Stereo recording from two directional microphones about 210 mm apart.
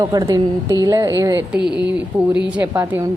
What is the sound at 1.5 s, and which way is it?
Speech, 50° right (ahead or behind).